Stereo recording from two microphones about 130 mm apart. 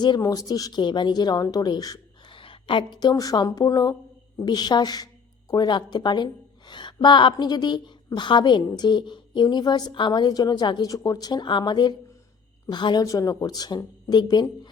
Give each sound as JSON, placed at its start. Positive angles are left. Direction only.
{"t": 0.0, "sound": "a woman's voice", "side_deg": 30}